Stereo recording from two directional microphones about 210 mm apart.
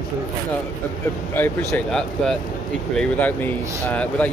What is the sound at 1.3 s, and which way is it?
Speech, 10° left (ahead or behind).